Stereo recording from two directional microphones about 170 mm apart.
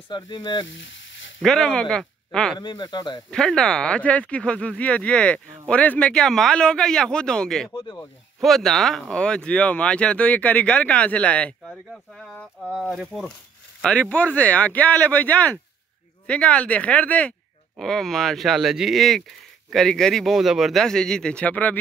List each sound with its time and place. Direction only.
0.1 s speech: 25° left (ahead or behind)
0.7 s frying: 90° left
1.4 s speech: 5° left (ahead or behind)
2.6 s speech: 25° left (ahead or behind)
3.3 s speech: 5° left (ahead or behind)
7.7 s speech: 20° left (ahead or behind)
8.4 s speech: centre (ahead or behind)